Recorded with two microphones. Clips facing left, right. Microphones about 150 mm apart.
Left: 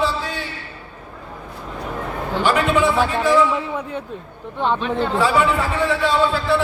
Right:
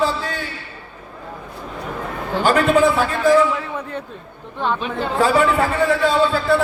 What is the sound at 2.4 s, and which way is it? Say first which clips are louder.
Speech: right 3 dB; 40° right (ahead or behind).